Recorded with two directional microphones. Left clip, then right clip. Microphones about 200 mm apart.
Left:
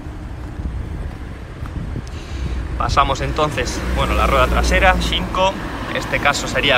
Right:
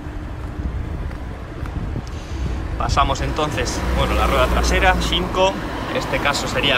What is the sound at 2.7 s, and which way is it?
A man's voice, 10° right (ahead or behind).